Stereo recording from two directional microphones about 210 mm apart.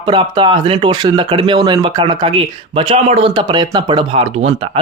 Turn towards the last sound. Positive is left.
turn(degrees=-25)  # may be behind; listen again after turning